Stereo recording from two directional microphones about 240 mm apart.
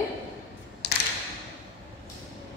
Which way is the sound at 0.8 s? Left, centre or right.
Left.